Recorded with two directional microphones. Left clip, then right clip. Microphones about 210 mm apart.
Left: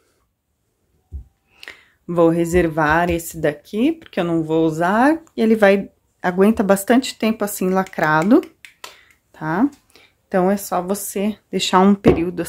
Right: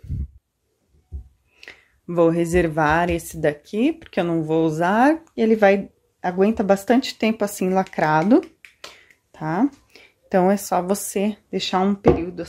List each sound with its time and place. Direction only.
1.5 s speech: 15° left (ahead or behind)
8.9 s a sound: centre (ahead or behind)
11.5 s speech: 10° left (ahead or behind)
12.2 s beatboxing: 25° left (ahead or behind)